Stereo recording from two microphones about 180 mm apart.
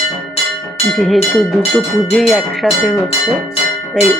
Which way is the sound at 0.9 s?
Centre (ahead or behind).